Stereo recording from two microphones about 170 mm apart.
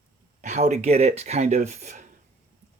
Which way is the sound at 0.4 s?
45° right (ahead or behind).